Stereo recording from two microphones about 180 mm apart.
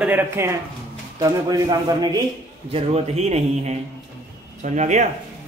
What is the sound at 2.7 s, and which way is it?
A man's voice, 35° right (ahead or behind).